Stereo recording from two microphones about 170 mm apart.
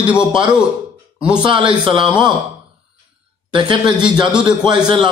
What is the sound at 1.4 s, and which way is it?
Speech, 25° right (ahead or behind).